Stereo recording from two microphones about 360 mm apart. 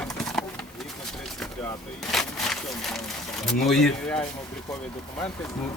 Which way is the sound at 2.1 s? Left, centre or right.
Centre.